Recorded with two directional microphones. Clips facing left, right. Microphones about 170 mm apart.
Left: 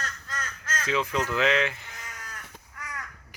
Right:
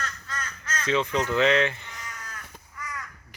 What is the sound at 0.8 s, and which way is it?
Speech, 5° left (ahead or behind).